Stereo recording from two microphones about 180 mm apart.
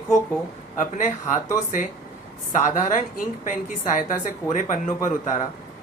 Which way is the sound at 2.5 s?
45° left (ahead or behind).